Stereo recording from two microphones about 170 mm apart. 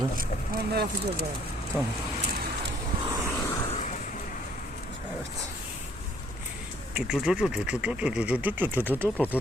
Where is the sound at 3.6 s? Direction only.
45° left (ahead or behind).